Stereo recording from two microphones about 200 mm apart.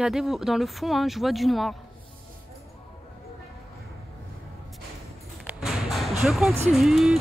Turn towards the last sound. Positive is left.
turn(degrees=0)  # may be behind; listen again after turning